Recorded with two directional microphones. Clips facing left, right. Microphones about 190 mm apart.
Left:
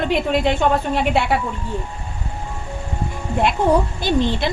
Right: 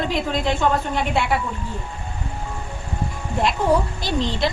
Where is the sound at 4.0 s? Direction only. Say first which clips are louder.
Left 3 dB; 55° left (ahead or behind).